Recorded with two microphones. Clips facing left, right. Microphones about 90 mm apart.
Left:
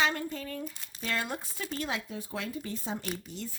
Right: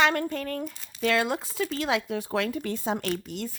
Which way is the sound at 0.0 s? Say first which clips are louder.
Right 6 dB; 65° right (ahead or behind).